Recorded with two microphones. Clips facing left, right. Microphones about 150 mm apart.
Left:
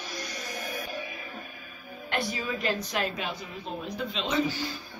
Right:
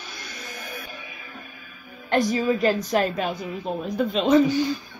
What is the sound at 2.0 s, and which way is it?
A woman's voice, 40° right (ahead or behind).